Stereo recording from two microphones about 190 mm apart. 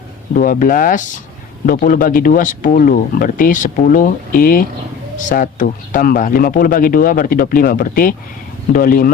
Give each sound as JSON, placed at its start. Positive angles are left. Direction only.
{"t": 0.3, "sound": "speech", "side_deg": 45}